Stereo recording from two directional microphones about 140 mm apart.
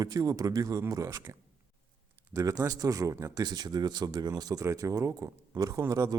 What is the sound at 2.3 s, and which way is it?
Speech, 25° right (ahead or behind).